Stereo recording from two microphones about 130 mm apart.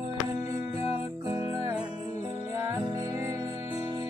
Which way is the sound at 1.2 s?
25° right (ahead or behind).